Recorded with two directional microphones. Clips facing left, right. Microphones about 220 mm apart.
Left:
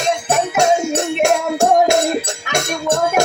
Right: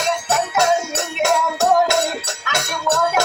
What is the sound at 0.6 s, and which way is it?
Music, 15° left (ahead or behind).